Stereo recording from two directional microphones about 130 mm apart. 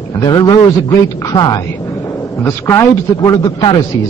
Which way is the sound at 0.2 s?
30° left (ahead or behind).